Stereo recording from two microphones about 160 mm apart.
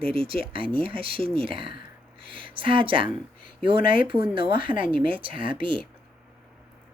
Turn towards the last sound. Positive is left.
turn(degrees=-30)  # may be behind; listen again after turning